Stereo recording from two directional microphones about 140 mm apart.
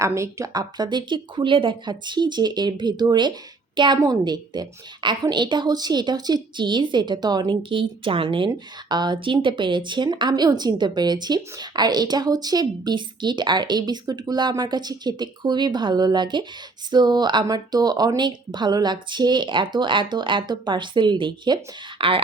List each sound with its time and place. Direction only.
0.0 s speech: 20° right (ahead or behind); by 22.2 s 40° right (ahead or behind)